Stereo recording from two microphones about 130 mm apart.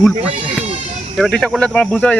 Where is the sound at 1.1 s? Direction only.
Centre (ahead or behind).